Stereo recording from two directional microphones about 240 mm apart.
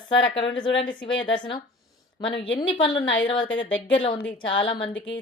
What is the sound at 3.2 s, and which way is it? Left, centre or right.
Speech, centre.